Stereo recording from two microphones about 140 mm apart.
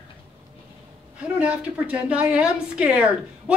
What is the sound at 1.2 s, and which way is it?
A woman's voice, 10° right (ahead or behind).